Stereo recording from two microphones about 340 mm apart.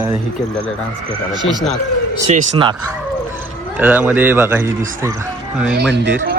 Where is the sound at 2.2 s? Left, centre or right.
Right.